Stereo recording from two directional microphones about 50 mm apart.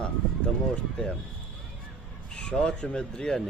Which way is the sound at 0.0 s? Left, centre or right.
Left.